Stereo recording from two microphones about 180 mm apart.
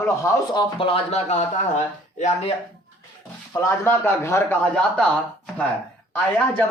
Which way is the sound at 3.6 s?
15° left (ahead or behind).